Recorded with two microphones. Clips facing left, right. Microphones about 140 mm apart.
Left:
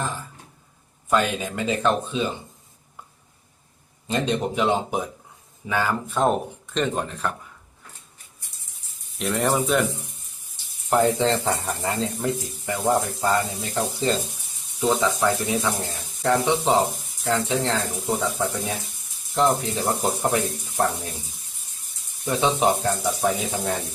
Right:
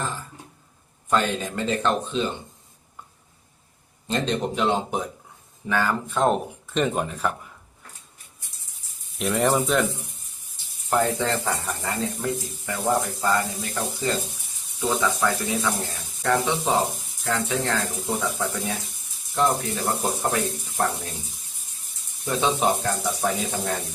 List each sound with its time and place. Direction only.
1.1 s speech: 10° left (ahead or behind)
4.1 s speech: 10° left (ahead or behind); by 7.3 s 10° right (ahead or behind)
9.1 s speech: centre (ahead or behind)
10.8 s speech: 25° left (ahead or behind)
22.3 s speech: 15° left (ahead or behind)